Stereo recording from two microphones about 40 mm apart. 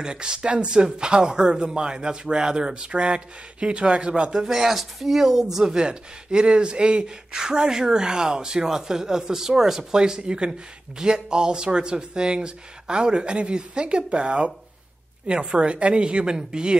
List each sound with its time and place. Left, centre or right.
0.0 s speech: right
4.5 s speech: centre